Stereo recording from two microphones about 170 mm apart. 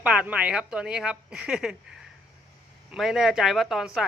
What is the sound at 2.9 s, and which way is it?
A man's voice, centre (ahead or behind).